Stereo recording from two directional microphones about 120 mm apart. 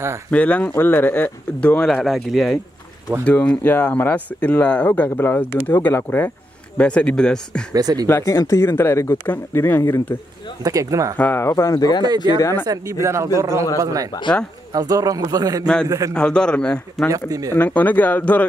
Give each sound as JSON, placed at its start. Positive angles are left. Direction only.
{"t": 0.3, "sound": "speech", "side_deg": 10}
{"t": 1.9, "sound": "speech", "side_deg": 0}
{"t": 3.3, "sound": "speech", "side_deg": 10}
{"t": 7.7, "sound": "a man's voice", "side_deg": -30}
{"t": 8.1, "sound": "speech", "side_deg": 25}
{"t": 10.6, "sound": "speech", "side_deg": -30}
{"t": 11.1, "sound": "speech", "side_deg": 15}
{"t": 12.6, "sound": "speech", "side_deg": -30}
{"t": 14.1, "sound": "speech", "side_deg": 30}
{"t": 14.7, "sound": "a man's voice", "side_deg": -30}
{"t": 15.6, "sound": "speech", "side_deg": 5}
{"t": 17.1, "sound": "speech", "side_deg": -30}
{"t": 17.5, "sound": "speech", "side_deg": 15}